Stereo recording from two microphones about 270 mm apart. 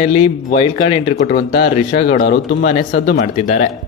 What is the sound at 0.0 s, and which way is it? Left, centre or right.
Speech, left.